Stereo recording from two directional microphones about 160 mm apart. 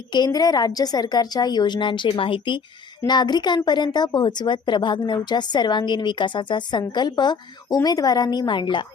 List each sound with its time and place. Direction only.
0.1 s a woman's voice: 25° left (ahead or behind)